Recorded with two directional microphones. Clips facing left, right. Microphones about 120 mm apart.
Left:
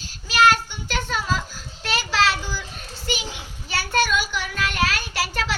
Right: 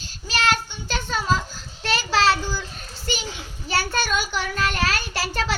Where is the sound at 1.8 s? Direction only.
35° right (ahead or behind).